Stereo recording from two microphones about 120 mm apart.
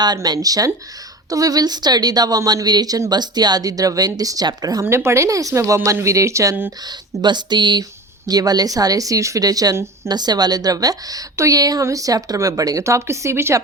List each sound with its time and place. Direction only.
0.0 s a woman's voice: 35° right (ahead or behind)
10.1 s a woman's voice: 35° right (ahead or behind)